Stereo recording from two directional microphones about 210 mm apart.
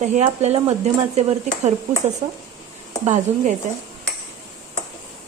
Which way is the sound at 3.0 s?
35° right (ahead or behind).